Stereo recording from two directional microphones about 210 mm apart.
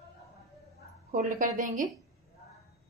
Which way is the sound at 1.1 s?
40° right (ahead or behind).